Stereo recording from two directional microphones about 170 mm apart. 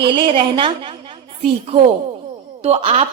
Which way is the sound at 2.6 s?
40° right (ahead or behind).